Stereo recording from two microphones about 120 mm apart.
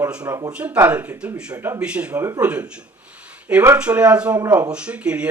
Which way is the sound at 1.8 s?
10° right (ahead or behind).